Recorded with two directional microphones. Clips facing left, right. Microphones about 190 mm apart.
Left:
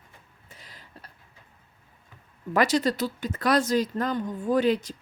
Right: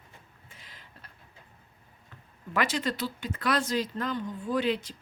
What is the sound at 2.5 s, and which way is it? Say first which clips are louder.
Speech: left 6 dB; 40° left (ahead or behind).